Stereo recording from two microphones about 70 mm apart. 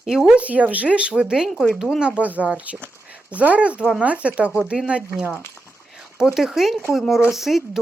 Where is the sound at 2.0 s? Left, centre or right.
Centre.